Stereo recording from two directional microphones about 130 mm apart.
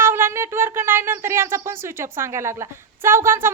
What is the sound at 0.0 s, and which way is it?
A woman's voice, 20° right (ahead or behind).